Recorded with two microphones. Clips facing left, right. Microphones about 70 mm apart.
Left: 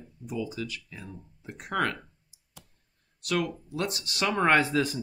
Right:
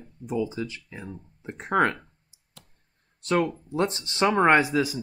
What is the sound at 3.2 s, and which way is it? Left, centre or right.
Speech, right.